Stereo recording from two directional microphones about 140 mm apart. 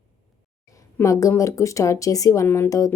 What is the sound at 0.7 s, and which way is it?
Speech, 25° left (ahead or behind).